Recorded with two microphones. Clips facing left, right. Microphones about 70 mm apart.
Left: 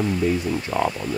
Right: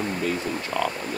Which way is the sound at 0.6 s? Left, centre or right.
Left.